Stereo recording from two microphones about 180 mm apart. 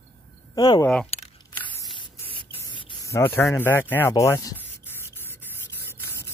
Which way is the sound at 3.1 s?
15° left (ahead or behind).